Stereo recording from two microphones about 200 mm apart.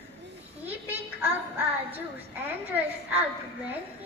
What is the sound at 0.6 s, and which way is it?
Child singing, 10° right (ahead or behind).